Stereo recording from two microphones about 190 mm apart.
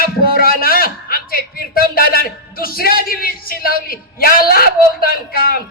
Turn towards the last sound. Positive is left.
turn(degrees=50)  # may be behind; listen again after turning